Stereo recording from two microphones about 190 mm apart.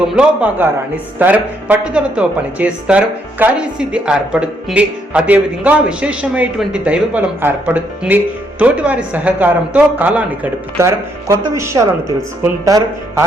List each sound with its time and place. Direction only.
0.2 s speech: 10° right (ahead or behind)